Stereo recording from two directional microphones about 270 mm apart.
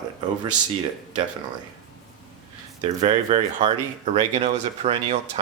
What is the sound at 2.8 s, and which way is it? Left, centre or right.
Speech, centre.